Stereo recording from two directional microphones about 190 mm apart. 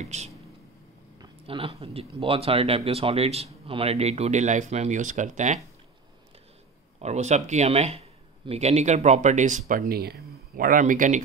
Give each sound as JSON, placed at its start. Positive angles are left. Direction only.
{"t": 0.0, "sound": "speech", "side_deg": -35}
{"t": 7.0, "sound": "speech", "side_deg": -35}